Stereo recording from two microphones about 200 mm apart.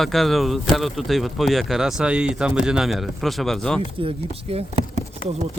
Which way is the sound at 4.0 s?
30° right (ahead or behind).